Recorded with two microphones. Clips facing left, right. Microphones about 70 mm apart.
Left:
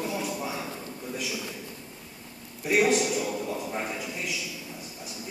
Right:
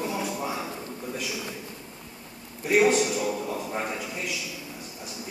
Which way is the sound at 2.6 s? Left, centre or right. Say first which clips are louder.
Right 2 dB; centre.